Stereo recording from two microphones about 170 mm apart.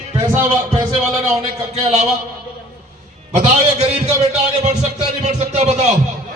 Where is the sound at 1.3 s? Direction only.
40° right (ahead or behind).